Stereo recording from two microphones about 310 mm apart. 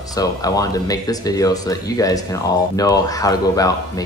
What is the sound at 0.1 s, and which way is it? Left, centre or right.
Speech, centre.